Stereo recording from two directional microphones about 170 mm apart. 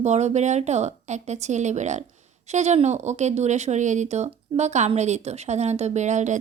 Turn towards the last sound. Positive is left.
turn(degrees=-45)  # may be behind; listen again after turning